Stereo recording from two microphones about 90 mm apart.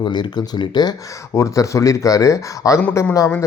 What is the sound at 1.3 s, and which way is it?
Speech, 35° left (ahead or behind).